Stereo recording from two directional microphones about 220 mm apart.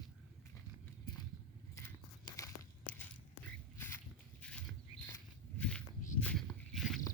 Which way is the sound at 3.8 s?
10° left (ahead or behind).